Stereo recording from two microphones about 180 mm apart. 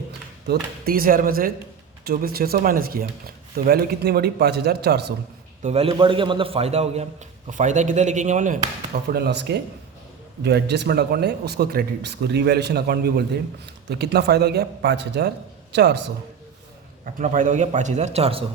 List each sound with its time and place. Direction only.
0.4 s speech: 60° right (ahead or behind)
5.6 s a man's voice: 35° right (ahead or behind)
9.0 s speech: 65° right (ahead or behind)
17.2 s a man's voice: 45° right (ahead or behind)